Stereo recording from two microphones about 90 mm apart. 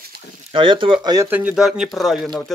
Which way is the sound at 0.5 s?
70° right (ahead or behind).